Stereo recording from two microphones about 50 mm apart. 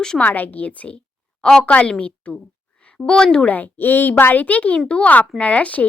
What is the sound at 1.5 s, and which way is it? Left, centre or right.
A woman's voice, centre.